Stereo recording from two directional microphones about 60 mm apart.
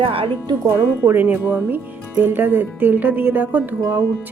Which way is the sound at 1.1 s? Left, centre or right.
Right.